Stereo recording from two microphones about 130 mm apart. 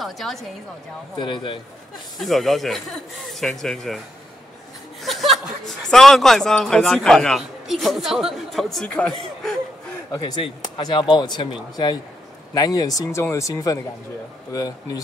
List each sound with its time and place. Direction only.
0.0 s speech: centre (ahead or behind)
1.2 s speech: 40° left (ahead or behind)
2.1 s speech: centre (ahead or behind)
5.0 s speech: centre (ahead or behind)
10.8 s speech: 35° left (ahead or behind)